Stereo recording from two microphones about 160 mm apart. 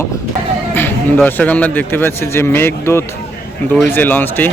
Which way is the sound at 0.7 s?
15° left (ahead or behind).